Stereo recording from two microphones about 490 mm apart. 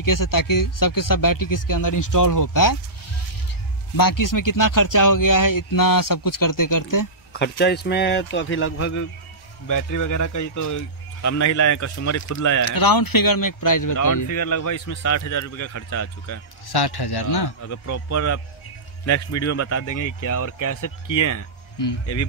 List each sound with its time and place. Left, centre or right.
0.0 s speech: left
3.9 s speech: left
7.3 s speech: centre; by 17.5 s left
17.6 s speech: left